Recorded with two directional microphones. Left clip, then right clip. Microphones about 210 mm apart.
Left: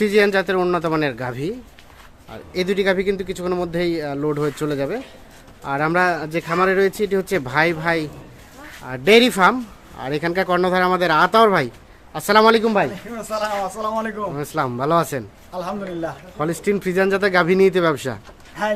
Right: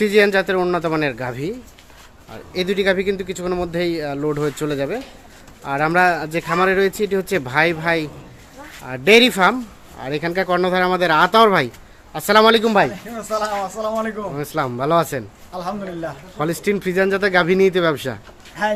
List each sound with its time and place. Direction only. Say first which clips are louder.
0.0 s speech: right 1 dB; centre (ahead or behind)
13.2 s a man's voice: right 1 dB; 30° left (ahead or behind)
14.3 s speech: right 2 dB; centre (ahead or behind)
15.5 s a man's voice: even; 15° left (ahead or behind)
16.4 s speech: right 1 dB; centre (ahead or behind)
18.6 s a man's voice: right 1 dB; 10° left (ahead or behind)